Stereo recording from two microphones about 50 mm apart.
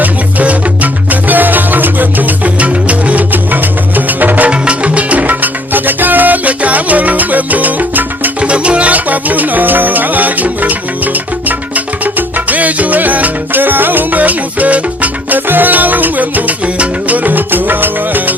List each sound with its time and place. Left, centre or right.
0.0 s music: right
4.4 s salsa music: right
8.4 s music: right